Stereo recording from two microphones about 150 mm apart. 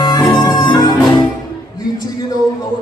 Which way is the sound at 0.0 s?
25° left (ahead or behind).